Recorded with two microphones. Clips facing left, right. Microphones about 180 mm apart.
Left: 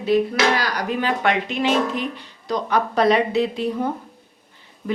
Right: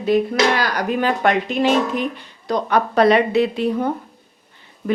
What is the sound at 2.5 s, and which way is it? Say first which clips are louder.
Speech: right 3 dB; 60° right (ahead or behind).